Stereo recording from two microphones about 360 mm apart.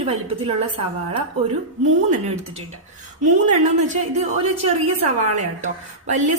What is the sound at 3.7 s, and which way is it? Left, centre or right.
A woman's voice, centre.